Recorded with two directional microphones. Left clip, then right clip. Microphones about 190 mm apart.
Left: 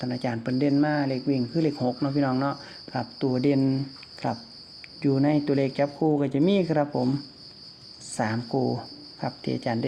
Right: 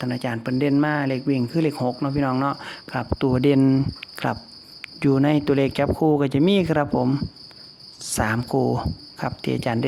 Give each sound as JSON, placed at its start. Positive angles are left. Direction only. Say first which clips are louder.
{"t": 0.0, "sound": "cricket", "louder": "right 3 dB", "side_deg": -20}
{"t": 0.7, "sound": "cricket", "louder": "right 3 dB", "side_deg": -30}